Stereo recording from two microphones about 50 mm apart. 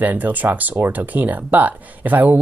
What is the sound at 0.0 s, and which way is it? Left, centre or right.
Speech, right.